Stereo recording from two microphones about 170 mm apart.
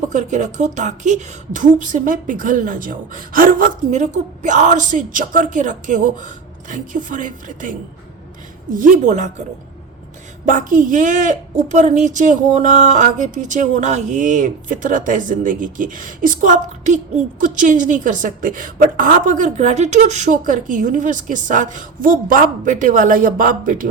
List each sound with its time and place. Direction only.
0.1 s a woman's voice: 45° right (ahead or behind)
10.4 s a woman's voice: 50° right (ahead or behind)